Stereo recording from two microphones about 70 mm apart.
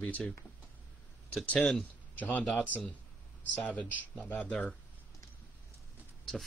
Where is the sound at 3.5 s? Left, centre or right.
Left.